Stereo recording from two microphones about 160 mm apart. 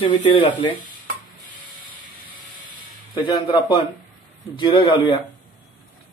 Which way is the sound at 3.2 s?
30° left (ahead or behind).